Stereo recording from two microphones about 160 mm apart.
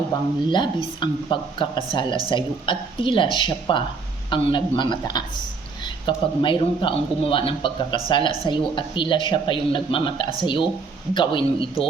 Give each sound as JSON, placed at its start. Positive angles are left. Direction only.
{"t": 0.1, "sound": "speech", "side_deg": 30}